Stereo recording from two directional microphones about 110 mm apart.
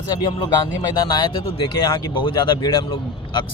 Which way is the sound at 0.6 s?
35° left (ahead or behind).